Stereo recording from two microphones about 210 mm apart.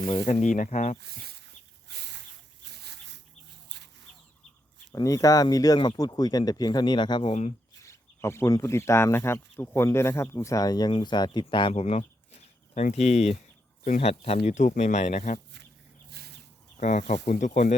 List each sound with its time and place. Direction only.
0.0 s speech: 25° left (ahead or behind)
0.9 s a sound: 50° right (ahead or behind)
4.9 s speech: 20° left (ahead or behind)
7.9 s speech: 10° left (ahead or behind); by 15.4 s 30° left (ahead or behind)
16.1 s a sound: 50° right (ahead or behind)
16.7 s speech: 35° left (ahead or behind)